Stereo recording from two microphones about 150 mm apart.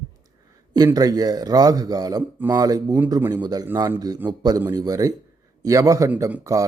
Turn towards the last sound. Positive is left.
turn(degrees=-20)  # may be behind; listen again after turning